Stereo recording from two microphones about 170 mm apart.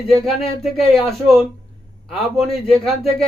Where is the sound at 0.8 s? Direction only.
35° left (ahead or behind).